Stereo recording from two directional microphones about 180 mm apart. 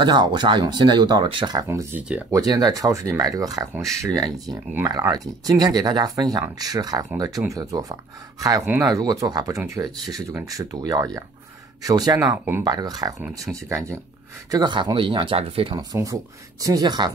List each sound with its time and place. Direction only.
0.0 s speech: 25° right (ahead or behind); by 2.2 s 10° right (ahead or behind)
2.3 s speech: 20° right (ahead or behind)